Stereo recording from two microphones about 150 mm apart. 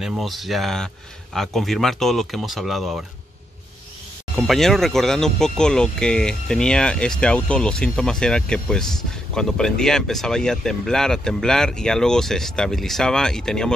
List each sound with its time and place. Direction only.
0.0 s speech: centre (ahead or behind)
4.4 s speech: centre (ahead or behind)